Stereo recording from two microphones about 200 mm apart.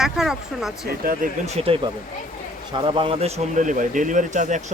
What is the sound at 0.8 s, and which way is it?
Speech, 45° right (ahead or behind).